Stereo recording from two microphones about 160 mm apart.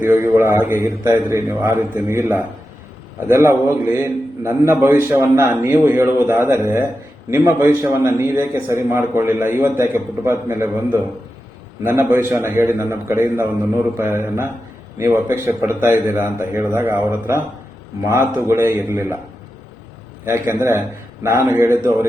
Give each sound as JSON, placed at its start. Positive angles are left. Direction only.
{"t": 0.0, "sound": "a man's voice", "side_deg": -15}
{"t": 20.5, "sound": "a man's voice", "side_deg": -15}